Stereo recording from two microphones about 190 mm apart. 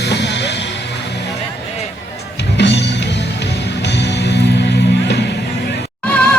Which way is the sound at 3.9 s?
65° left (ahead or behind).